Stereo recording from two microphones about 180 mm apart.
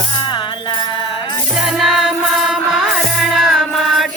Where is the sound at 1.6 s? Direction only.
Centre (ahead or behind).